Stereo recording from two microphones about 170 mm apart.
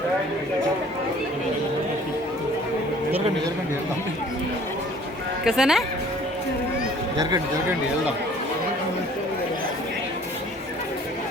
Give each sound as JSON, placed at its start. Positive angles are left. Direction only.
{"t": 5.5, "sound": "speech", "side_deg": 0}
{"t": 7.2, "sound": "speech", "side_deg": -20}